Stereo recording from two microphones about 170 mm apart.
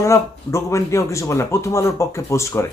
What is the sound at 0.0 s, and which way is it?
Speech, 15° left (ahead or behind).